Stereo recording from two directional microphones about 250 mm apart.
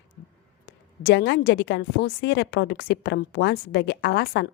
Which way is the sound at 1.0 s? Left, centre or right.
Left.